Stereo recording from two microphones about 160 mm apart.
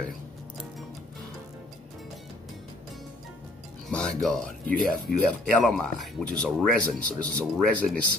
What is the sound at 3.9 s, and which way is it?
Speech, 5° left (ahead or behind).